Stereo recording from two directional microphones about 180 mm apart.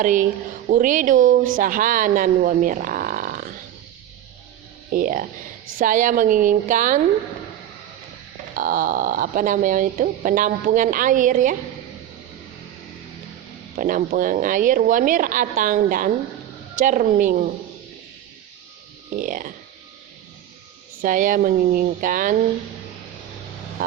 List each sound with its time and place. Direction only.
0.0 s speech: 45° right (ahead or behind)
4.9 s speech: 50° right (ahead or behind)
8.5 s speech: 50° right (ahead or behind)
13.7 s speech: 50° right (ahead or behind)
19.1 s speech: 50° right (ahead or behind)
21.0 s speech: 50° right (ahead or behind)